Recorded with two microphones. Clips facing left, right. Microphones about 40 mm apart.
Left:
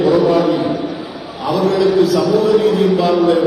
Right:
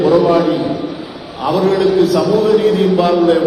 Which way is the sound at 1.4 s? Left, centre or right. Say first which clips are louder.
Right 2 dB; right.